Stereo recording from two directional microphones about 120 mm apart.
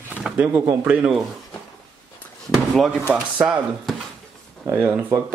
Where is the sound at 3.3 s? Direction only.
15° right (ahead or behind).